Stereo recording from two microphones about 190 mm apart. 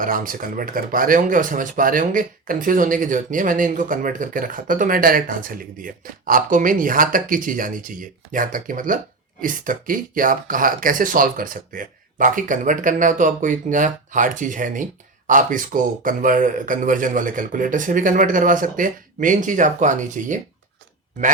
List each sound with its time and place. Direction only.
0.0 s speech: 45° right (ahead or behind)